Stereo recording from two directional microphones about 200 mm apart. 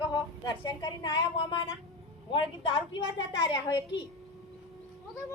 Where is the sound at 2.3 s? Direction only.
25° left (ahead or behind).